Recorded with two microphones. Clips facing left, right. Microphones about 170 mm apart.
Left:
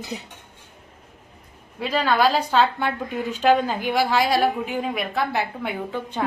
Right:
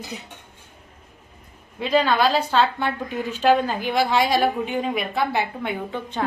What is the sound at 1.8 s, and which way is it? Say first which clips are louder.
A woman's voice: right 1 dB; 5° left (ahead or behind).